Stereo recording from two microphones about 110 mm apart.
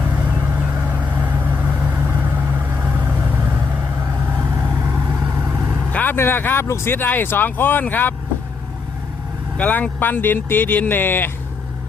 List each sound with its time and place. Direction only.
0.5 s vehicle: 15° right (ahead or behind)
5.9 s speech: 15° left (ahead or behind)
9.6 s speech: 15° left (ahead or behind)